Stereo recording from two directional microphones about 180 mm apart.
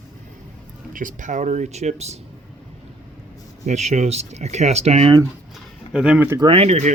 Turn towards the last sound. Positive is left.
turn(degrees=-35)  # may be behind; listen again after turning